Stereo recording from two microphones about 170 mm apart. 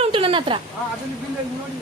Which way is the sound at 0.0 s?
30° right (ahead or behind).